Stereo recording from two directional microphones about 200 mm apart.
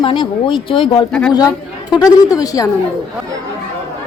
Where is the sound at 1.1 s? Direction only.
5° left (ahead or behind).